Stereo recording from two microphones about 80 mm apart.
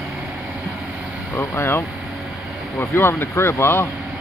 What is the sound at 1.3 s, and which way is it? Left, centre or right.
Speech, left.